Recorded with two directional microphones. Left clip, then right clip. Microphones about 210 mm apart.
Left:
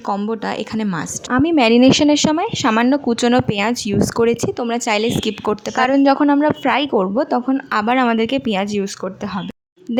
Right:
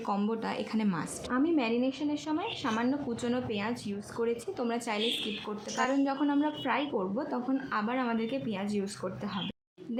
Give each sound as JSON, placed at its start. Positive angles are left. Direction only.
{"t": 0.1, "sound": "a woman's voice", "side_deg": 35}